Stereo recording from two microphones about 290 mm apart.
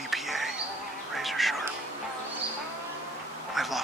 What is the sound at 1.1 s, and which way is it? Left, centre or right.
Music, centre.